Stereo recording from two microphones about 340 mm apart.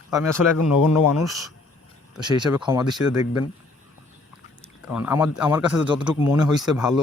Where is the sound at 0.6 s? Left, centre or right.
Left.